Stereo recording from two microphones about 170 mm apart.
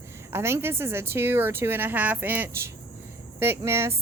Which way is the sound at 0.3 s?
15° right (ahead or behind).